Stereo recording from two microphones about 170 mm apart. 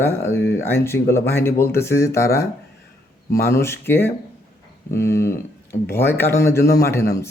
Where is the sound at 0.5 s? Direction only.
15° left (ahead or behind).